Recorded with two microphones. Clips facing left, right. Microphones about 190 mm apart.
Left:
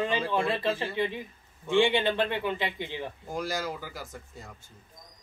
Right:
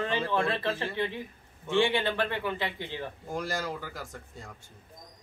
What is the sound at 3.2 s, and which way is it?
A man's voice, centre (ahead or behind).